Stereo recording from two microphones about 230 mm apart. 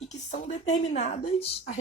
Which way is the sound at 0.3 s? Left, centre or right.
Left.